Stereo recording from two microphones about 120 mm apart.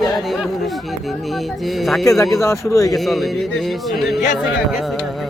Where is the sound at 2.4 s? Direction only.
25° left (ahead or behind).